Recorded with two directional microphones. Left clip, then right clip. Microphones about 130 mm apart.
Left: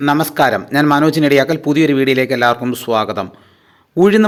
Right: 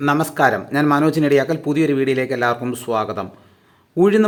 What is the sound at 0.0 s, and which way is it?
Speech, 15° left (ahead or behind).